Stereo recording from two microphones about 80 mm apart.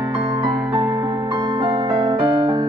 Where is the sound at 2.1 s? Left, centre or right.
Right.